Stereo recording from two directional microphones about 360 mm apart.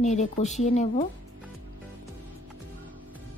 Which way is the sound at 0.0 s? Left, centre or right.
Centre.